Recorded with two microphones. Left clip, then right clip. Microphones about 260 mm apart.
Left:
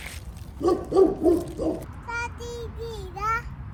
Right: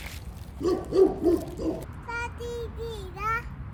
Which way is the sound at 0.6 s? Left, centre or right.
Centre.